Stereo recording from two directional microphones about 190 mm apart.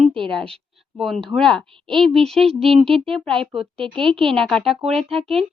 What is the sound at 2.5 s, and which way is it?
Speech, 30° right (ahead or behind).